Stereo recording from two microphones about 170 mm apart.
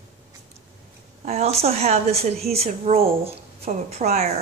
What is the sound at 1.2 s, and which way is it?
Speech, 40° right (ahead or behind).